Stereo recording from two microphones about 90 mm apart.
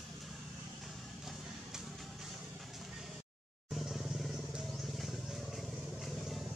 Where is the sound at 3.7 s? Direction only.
Centre (ahead or behind).